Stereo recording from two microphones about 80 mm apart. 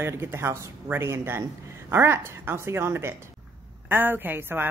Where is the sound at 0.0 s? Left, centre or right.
Right.